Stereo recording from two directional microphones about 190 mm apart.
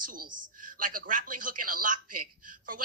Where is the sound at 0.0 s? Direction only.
45° right (ahead or behind).